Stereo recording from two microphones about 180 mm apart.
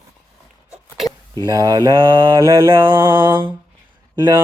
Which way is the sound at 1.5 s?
20° right (ahead or behind).